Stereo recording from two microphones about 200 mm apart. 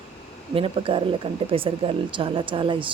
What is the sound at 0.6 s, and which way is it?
Speech, 25° right (ahead or behind).